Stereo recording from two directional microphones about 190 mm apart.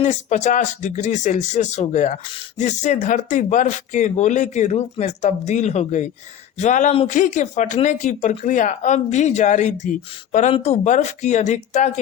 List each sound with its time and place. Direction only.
0.0 s speech: 40° left (ahead or behind)